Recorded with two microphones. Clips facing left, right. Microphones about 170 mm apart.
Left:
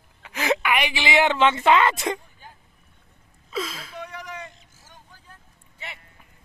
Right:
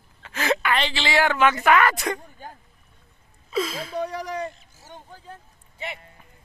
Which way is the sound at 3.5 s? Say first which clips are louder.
Right 5 dB; centre (ahead or behind).